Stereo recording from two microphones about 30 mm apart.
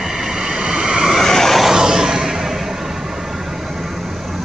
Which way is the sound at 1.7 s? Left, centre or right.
Right.